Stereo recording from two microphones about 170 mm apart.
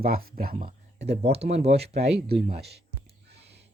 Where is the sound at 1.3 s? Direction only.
40° right (ahead or behind).